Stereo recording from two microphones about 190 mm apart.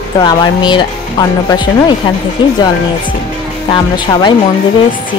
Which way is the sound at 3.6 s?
20° left (ahead or behind).